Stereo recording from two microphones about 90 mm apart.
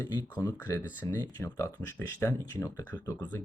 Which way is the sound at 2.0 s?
20° left (ahead or behind).